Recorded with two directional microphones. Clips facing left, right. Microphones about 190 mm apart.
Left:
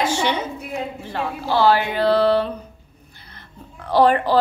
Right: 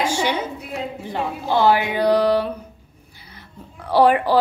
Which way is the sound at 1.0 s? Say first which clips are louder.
Right 1 dB; 15° right (ahead or behind).